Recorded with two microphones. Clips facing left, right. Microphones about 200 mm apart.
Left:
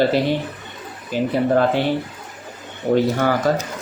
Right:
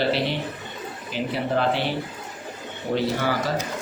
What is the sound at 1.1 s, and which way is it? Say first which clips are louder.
Speech: left 8 dB; 50° left (ahead or behind).